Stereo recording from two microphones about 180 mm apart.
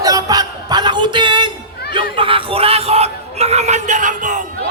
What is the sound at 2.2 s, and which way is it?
Crowd, 30° right (ahead or behind).